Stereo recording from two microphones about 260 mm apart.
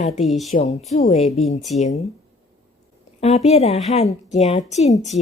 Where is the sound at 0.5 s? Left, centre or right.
Left.